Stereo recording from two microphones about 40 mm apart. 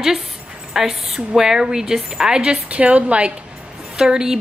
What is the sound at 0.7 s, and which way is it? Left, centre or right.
Speech, centre.